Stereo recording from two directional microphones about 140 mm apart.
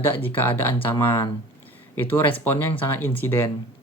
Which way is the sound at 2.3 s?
15° left (ahead or behind).